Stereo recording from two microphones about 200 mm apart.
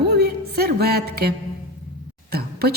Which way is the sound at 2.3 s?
50° right (ahead or behind).